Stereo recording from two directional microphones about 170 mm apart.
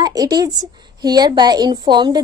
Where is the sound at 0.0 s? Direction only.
20° right (ahead or behind).